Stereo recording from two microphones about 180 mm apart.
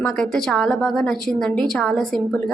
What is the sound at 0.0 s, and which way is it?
A woman's voice, 5° left (ahead or behind).